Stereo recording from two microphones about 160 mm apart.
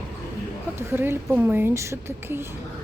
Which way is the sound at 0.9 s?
15° right (ahead or behind).